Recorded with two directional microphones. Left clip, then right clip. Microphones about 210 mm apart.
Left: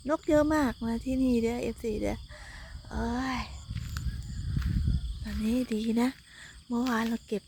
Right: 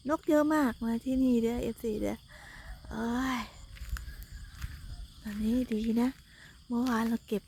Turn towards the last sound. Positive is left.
turn(degrees=-10)  # may be behind; listen again after turning